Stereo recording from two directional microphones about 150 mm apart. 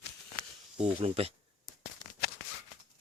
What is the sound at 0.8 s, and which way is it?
Speech, 40° right (ahead or behind).